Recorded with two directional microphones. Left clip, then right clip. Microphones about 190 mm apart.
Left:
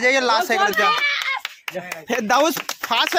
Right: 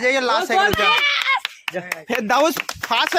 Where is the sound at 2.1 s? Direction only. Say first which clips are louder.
Even; centre (ahead or behind).